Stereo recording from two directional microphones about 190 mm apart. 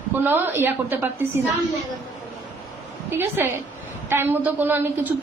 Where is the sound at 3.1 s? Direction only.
10° right (ahead or behind).